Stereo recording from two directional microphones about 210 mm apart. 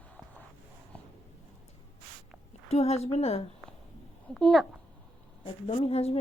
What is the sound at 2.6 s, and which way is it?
Speech, 30° left (ahead or behind).